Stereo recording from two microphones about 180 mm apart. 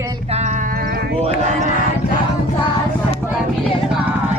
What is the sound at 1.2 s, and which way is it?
Speech, 45° right (ahead or behind).